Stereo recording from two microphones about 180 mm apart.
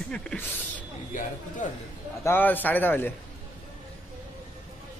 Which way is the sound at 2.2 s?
10° left (ahead or behind).